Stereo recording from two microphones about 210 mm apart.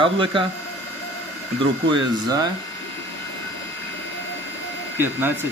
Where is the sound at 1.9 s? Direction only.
20° right (ahead or behind).